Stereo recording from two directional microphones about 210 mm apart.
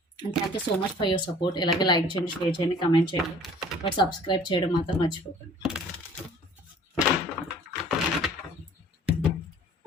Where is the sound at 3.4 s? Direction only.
Centre (ahead or behind).